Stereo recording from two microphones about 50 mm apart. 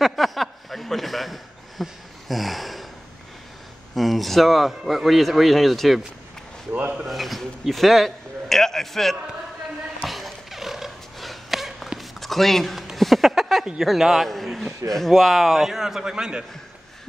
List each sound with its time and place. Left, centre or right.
0.0 s a sound: centre
3.9 s speech: centre
6.7 s speech: right
7.1 s speech: centre
10.0 s a sound: centre
13.7 s a man's voice: centre